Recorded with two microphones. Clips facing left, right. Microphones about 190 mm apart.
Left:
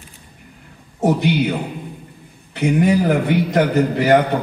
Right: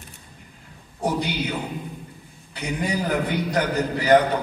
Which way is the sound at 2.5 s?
70° left (ahead or behind).